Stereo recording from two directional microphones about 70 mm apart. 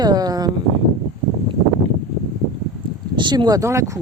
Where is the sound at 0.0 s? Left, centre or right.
Right.